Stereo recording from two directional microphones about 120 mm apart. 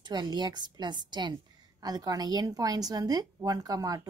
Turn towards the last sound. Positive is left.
turn(degrees=-30)  # may be behind; listen again after turning